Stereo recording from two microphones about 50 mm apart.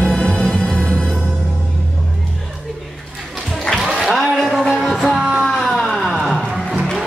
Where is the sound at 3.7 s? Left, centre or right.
Centre.